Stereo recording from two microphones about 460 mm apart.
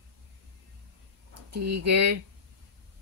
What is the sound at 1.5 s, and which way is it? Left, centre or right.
Speech, right.